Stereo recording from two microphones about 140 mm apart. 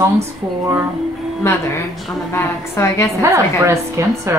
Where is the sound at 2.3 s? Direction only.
20° left (ahead or behind).